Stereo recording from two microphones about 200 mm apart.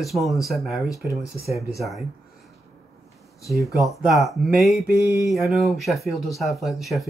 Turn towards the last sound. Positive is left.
turn(degrees=0)  # may be behind; listen again after turning